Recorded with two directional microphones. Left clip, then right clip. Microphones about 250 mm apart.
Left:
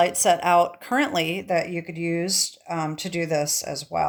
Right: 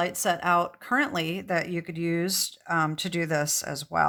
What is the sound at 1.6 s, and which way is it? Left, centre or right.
Speech, right.